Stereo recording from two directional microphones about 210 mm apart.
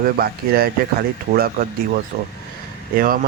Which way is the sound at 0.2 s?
45° right (ahead or behind).